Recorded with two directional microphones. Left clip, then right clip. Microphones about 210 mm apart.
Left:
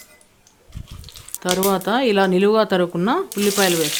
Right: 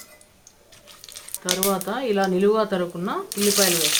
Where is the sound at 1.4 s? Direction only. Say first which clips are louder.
Left 5 dB; 50° left (ahead or behind).